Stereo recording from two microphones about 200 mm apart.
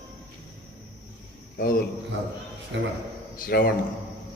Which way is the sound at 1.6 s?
45° left (ahead or behind).